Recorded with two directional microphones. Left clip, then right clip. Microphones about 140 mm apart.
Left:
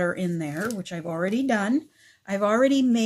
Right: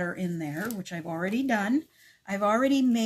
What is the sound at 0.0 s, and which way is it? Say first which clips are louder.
Speech: left 6 dB; 45° left (ahead or behind).